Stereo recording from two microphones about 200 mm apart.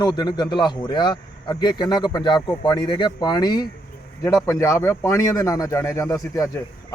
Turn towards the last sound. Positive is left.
turn(degrees=15)  # may be behind; listen again after turning